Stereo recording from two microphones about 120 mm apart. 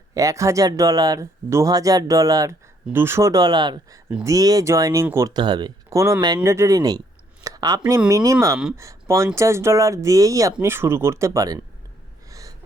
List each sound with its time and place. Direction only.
0.1 s speech: 30° right (ahead or behind)
7.4 s a sound: 30° right (ahead or behind)
7.9 s speech: 25° right (ahead or behind)
12.3 s gasp: 30° right (ahead or behind)